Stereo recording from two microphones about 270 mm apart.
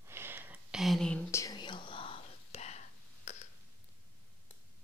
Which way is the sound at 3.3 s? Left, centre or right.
Left.